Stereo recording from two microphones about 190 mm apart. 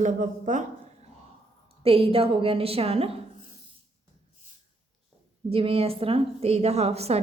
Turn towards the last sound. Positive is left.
turn(degrees=-35)  # may be behind; listen again after turning